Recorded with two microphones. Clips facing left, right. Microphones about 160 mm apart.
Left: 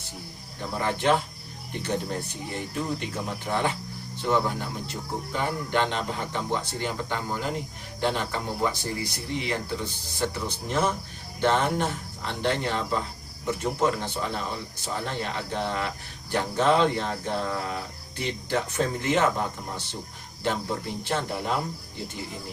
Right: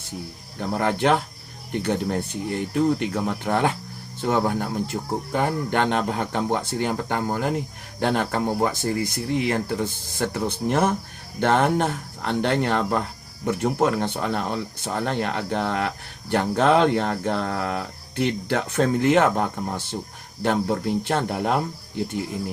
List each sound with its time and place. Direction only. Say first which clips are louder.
0.8 s speech: right 3 dB; 60° right (ahead or behind)